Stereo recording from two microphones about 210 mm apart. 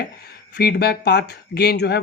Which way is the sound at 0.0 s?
50° left (ahead or behind).